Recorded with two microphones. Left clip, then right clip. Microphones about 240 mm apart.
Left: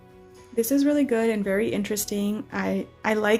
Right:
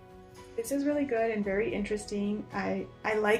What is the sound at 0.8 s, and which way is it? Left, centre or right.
Speech, left.